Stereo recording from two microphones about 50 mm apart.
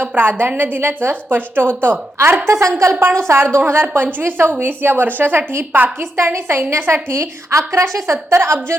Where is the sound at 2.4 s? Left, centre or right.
Right.